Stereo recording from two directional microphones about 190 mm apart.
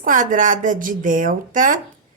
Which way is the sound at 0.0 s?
45° right (ahead or behind).